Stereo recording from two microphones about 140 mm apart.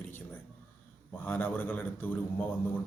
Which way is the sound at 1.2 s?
10° left (ahead or behind).